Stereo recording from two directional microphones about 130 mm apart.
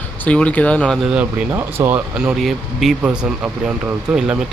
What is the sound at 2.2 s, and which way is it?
Speech, 5° right (ahead or behind).